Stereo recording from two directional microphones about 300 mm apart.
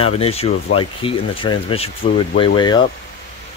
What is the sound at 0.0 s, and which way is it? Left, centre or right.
Speech, centre.